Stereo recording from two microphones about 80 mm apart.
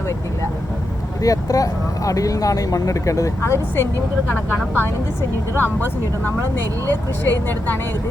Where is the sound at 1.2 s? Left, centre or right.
Left.